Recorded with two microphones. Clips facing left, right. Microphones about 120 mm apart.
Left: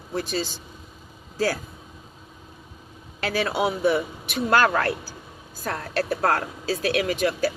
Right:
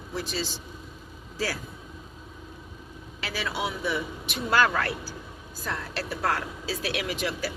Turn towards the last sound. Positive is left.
turn(degrees=45)  # may be behind; listen again after turning